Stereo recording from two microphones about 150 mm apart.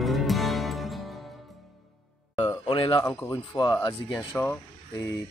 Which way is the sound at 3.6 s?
35° left (ahead or behind).